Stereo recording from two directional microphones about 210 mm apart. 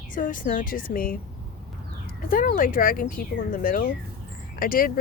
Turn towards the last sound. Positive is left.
turn(degrees=45)  # may be behind; listen again after turning